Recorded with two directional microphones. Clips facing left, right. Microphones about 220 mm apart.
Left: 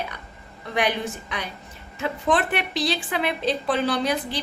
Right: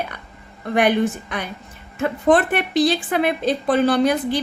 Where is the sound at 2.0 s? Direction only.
50° right (ahead or behind).